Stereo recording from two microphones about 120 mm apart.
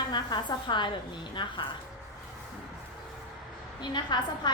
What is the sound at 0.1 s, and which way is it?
Speech, 40° left (ahead or behind).